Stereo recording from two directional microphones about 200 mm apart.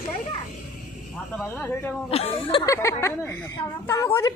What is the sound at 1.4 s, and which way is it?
Speech, 10° left (ahead or behind).